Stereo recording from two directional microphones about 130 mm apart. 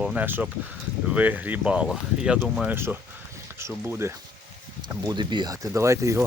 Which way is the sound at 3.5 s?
20° right (ahead or behind).